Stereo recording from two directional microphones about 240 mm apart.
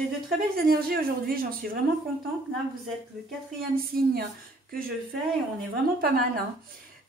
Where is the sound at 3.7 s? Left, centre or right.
Right.